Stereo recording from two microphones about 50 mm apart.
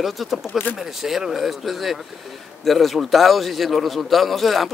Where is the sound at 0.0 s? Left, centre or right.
Centre.